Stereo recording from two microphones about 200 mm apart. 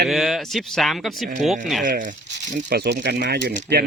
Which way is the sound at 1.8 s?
40° right (ahead or behind).